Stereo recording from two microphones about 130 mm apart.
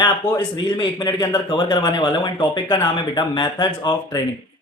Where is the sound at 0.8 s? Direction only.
35° left (ahead or behind).